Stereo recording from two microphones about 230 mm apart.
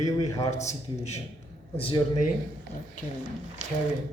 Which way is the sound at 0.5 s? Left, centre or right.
Left.